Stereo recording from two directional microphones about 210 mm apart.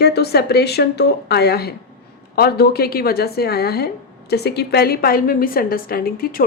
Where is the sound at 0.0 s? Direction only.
50° left (ahead or behind).